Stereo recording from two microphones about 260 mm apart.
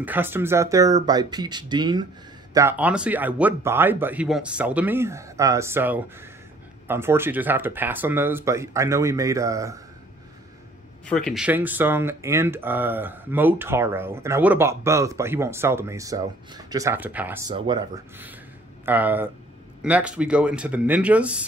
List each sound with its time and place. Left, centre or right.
0.0 s speech: centre
11.1 s speech: centre
17.5 s speech: centre